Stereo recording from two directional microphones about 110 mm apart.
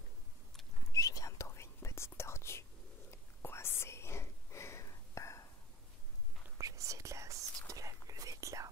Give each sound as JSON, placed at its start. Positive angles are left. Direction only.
{"t": 0.9, "sound": "whispering", "side_deg": 30}
{"t": 6.6, "sound": "whispering", "side_deg": -30}